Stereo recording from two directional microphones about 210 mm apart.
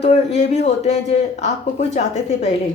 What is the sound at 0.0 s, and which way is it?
A woman's voice, 30° left (ahead or behind).